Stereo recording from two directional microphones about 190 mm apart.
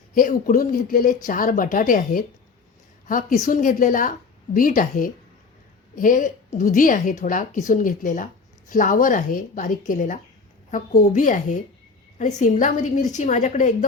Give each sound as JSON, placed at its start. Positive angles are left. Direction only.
{"t": 0.1, "sound": "a woman's voice", "side_deg": 45}